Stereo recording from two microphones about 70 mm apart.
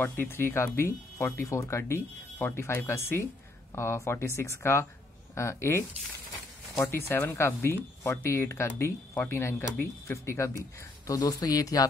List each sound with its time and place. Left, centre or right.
0.0 s speech: left
11.1 s speech: left